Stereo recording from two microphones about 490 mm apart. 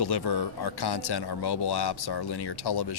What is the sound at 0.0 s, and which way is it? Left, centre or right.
Speech, left.